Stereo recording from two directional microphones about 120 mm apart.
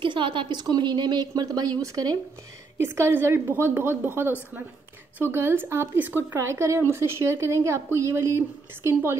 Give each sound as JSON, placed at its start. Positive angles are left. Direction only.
{"t": 0.0, "sound": "speech", "side_deg": -45}
{"t": 3.0, "sound": "speech", "side_deg": -20}